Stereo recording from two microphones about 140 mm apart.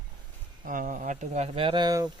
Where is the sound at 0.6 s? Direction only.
75° right (ahead or behind); by 2.0 s 30° right (ahead or behind).